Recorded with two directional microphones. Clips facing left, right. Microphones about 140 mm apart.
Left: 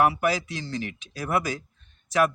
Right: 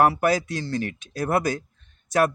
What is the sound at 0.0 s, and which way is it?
Speech, 45° right (ahead or behind).